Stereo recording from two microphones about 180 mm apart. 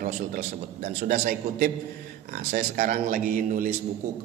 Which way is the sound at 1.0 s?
50° right (ahead or behind).